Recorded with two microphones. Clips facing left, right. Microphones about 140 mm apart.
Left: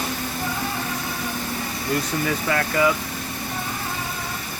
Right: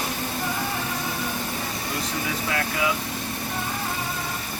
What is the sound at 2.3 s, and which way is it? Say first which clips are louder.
Speech: left 4 dB; 60° left (ahead or behind).